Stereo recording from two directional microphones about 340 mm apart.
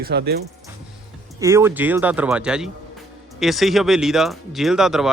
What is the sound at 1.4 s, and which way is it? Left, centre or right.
Speech, centre.